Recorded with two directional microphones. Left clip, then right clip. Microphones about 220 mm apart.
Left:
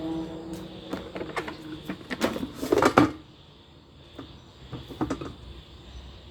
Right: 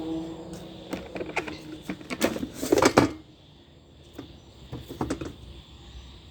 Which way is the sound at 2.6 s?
25° right (ahead or behind).